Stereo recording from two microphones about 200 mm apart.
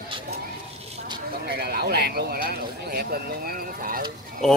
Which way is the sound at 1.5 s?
50° right (ahead or behind).